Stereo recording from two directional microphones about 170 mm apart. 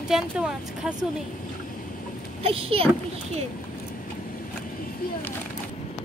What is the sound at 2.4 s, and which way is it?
Speech, 35° right (ahead or behind).